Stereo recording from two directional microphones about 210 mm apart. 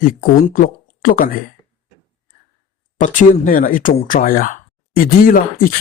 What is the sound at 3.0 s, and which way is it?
A woman's voice, 40° left (ahead or behind).